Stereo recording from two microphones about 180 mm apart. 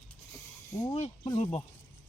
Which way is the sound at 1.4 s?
40° left (ahead or behind).